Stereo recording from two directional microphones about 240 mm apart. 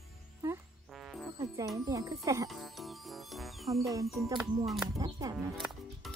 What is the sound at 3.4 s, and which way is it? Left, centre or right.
Music, centre.